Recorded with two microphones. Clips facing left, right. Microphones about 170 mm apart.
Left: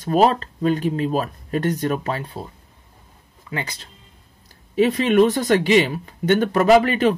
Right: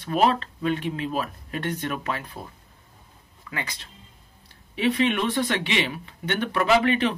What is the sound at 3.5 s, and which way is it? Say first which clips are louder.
Speech: left 5 dB; 35° left (ahead or behind).